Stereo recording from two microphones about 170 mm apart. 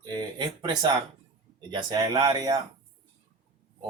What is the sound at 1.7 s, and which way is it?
Speech, 25° right (ahead or behind).